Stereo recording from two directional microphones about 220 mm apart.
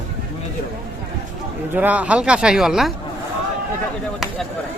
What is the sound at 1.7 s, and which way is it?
Speech, 5° right (ahead or behind).